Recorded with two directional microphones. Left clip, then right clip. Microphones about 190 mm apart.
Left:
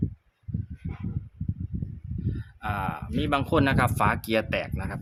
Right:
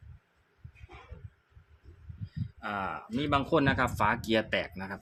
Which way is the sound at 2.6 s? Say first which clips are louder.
Left 3 dB; 20° left (ahead or behind).